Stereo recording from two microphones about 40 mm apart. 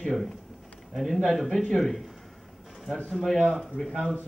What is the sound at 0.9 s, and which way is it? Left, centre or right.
A man's voice, centre.